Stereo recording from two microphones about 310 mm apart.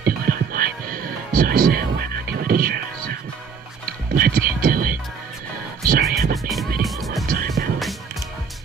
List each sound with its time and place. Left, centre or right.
0.0 s music: right
4.1 s a sound: right
5.9 s music: right
6.3 s music: centre
7.2 s music: right